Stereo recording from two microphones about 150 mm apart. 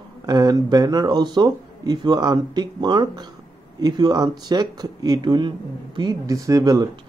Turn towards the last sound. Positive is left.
turn(degrees=-25)  # may be behind; listen again after turning